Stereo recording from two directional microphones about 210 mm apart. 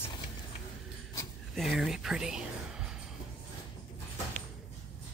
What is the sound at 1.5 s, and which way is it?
Speech, centre (ahead or behind).